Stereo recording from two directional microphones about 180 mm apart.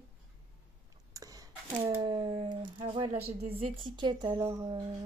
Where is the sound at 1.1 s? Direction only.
20° right (ahead or behind).